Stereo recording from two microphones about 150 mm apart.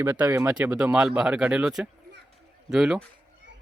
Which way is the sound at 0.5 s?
10° right (ahead or behind).